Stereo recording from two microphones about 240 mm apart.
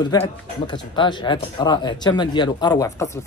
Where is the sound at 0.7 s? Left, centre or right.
Centre.